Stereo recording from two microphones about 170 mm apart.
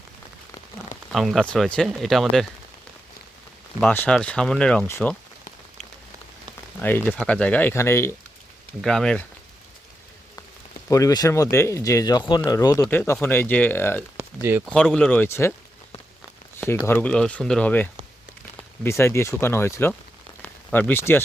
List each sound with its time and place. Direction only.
1.1 s speech: centre (ahead or behind)
3.8 s speech: 10° left (ahead or behind)
6.8 s speech: 10° left (ahead or behind)
8.8 s speech: 5° left (ahead or behind)
10.8 s speech: 20° left (ahead or behind)
16.7 s speech: 15° left (ahead or behind)
20.4 s a sound: 10° left (ahead or behind)